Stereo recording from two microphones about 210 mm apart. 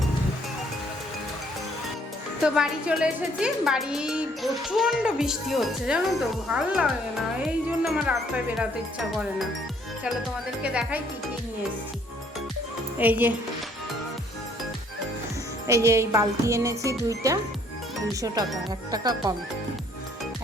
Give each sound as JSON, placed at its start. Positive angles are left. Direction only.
{"t": 2.4, "sound": "speech", "side_deg": -5}
{"t": 10.6, "sound": "speech", "side_deg": -5}
{"t": 13.0, "sound": "speech", "side_deg": -10}
{"t": 15.6, "sound": "speech", "side_deg": -15}